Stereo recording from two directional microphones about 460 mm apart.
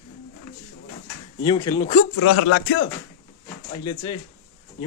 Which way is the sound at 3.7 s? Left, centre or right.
Centre.